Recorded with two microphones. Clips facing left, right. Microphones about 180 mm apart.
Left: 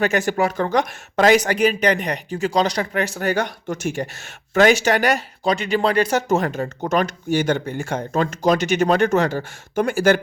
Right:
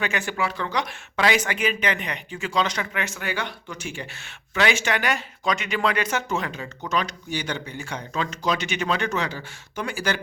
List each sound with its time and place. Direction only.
0.0 s speech: 45° left (ahead or behind)